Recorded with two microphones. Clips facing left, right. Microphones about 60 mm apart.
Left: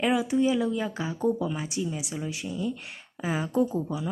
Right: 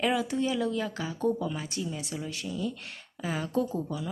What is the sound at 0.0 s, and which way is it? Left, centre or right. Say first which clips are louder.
Speech: left 4 dB; centre.